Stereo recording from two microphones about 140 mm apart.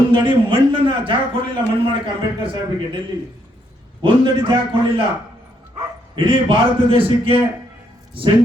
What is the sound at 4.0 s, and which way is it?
A man's voice, 35° right (ahead or behind).